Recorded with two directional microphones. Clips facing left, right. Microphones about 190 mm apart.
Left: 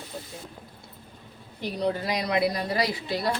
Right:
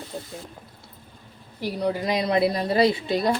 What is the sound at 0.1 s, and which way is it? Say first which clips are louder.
Speech: right 4 dB; 25° right (ahead or behind).